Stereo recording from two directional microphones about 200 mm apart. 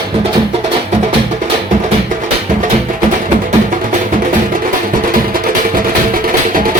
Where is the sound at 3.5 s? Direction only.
40° right (ahead or behind).